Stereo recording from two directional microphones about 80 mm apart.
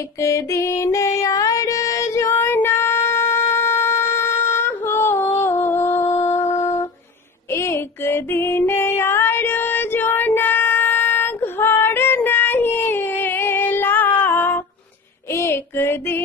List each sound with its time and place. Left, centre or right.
0.2 s music: left
15.3 s child singing: left